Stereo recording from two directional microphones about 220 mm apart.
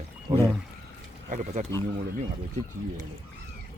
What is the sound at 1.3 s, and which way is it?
Speech, 30° right (ahead or behind).